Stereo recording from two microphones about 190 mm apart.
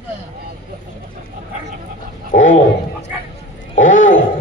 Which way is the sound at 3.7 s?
40° left (ahead or behind).